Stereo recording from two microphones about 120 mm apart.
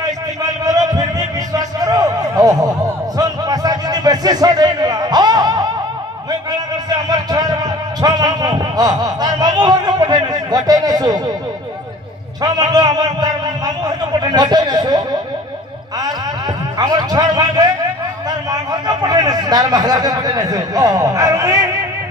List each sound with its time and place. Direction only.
0.0 s a sound: 30° right (ahead or behind)
6.9 s speech: 35° right (ahead or behind)
12.4 s speech: 35° right (ahead or behind)
16.7 s speech: 35° right (ahead or behind)